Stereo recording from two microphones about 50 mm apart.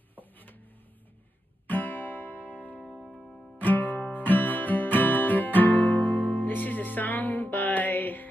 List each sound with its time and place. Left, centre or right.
0.1 s a sound: left
1.7 s music: left
2.9 s music: centre
3.5 s music: left